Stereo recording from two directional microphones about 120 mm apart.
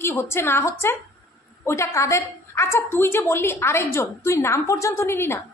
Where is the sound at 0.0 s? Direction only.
20° left (ahead or behind).